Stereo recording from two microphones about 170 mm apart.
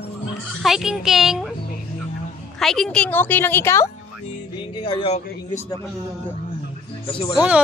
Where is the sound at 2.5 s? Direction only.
Centre (ahead or behind).